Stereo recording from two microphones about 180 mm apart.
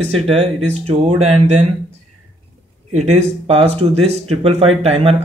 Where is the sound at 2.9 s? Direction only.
35° right (ahead or behind).